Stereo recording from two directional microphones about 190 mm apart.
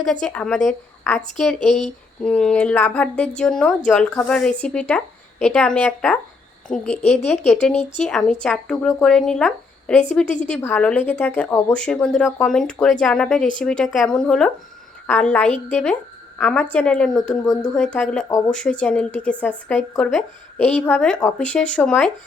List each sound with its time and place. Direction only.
0.0 s speech: 5° left (ahead or behind)
7.0 s speech: 35° left (ahead or behind)
7.9 s speech: 5° left (ahead or behind)